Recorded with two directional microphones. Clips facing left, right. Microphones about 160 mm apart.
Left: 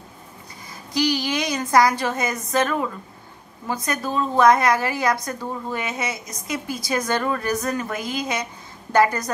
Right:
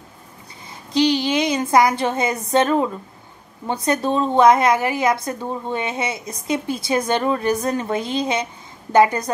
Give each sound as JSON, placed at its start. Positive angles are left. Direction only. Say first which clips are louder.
{"t": 0.9, "sound": "a woman's voice", "louder": "right 5 dB", "side_deg": -25}